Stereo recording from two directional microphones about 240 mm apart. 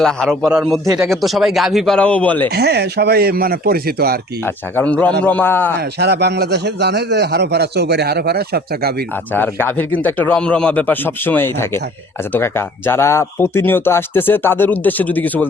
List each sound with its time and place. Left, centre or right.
0.0 s speech: centre
2.5 s speech: right
4.4 s speech: centre
6.0 s a man's voice: right
9.3 s speech: centre